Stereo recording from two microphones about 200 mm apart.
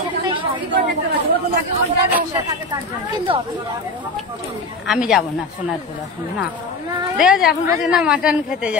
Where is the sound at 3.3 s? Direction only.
25° right (ahead or behind).